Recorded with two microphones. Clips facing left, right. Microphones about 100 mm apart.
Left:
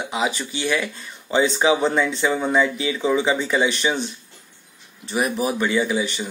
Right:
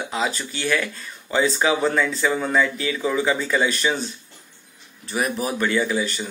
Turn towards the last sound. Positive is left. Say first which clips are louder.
# left 1 dB
turn(degrees=15)  # may be behind; listen again after turning